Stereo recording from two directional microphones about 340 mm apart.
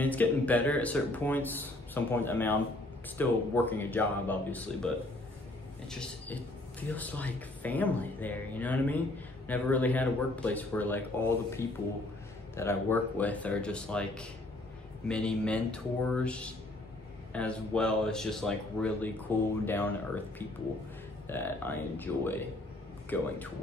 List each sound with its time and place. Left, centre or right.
0.0 s speech: centre
21.3 s speech: centre